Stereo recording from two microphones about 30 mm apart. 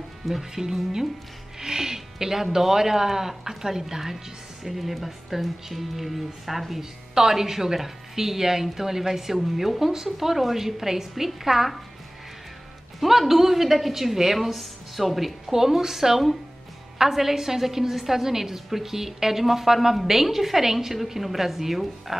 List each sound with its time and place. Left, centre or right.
0.2 s a woman's voice: centre
13.3 s a woman's voice: centre
15.5 s a woman's voice: centre